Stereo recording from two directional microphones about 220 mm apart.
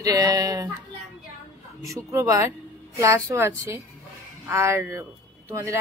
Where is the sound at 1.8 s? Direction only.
15° right (ahead or behind).